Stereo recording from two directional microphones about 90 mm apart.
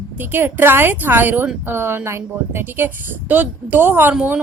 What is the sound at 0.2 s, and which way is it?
Speech, 25° right (ahead or behind).